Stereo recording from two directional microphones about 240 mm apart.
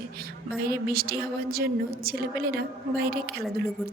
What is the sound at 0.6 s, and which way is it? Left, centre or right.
A woman's voice, right.